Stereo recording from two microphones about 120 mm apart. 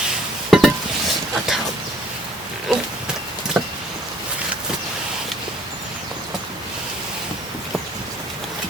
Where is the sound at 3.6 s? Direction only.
5° right (ahead or behind).